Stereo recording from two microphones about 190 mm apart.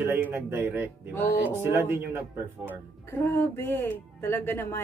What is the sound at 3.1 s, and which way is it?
Speech, 10° left (ahead or behind).